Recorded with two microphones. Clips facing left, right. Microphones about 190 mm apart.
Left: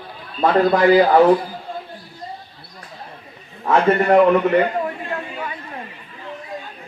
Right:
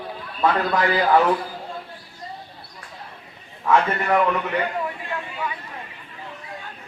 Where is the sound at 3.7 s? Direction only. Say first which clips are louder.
Left 5 dB; 40° left (ahead or behind).